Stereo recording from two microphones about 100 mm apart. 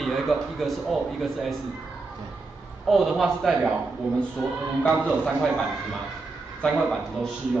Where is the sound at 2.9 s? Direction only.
Centre (ahead or behind).